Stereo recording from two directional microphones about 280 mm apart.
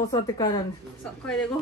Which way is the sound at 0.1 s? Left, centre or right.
Centre.